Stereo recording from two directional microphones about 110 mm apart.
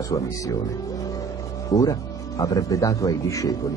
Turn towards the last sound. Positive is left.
turn(degrees=30)  # may be behind; listen again after turning